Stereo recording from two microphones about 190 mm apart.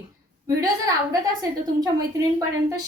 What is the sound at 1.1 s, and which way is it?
Speech, 20° right (ahead or behind).